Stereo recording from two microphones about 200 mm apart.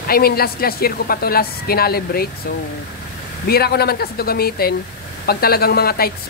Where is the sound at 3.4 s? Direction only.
50° left (ahead or behind).